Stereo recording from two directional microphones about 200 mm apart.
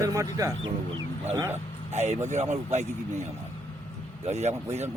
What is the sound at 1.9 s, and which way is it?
Speech, 35° right (ahead or behind).